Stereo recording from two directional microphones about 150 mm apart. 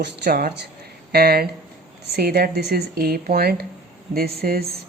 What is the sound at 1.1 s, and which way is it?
Speech, 90° right.